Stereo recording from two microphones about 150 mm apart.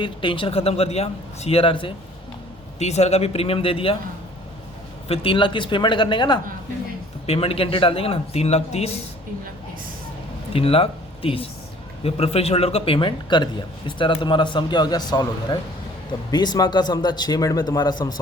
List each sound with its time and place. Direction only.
0.0 s a man's voice: 35° left (ahead or behind)
2.7 s a man's voice: 45° left (ahead or behind)
5.0 s a man's voice: 40° left (ahead or behind)
10.5 s a man's voice: 40° left (ahead or behind)